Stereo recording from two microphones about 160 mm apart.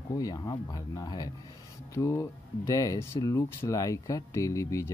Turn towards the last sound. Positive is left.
turn(degrees=20)  # may be behind; listen again after turning